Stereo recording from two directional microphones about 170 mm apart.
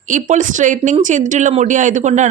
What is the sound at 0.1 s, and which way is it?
Speech, 45° right (ahead or behind).